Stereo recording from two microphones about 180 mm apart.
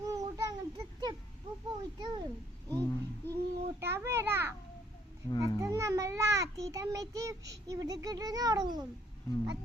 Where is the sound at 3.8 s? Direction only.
15° right (ahead or behind).